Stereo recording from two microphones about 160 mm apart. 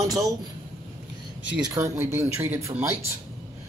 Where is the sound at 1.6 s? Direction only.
20° right (ahead or behind).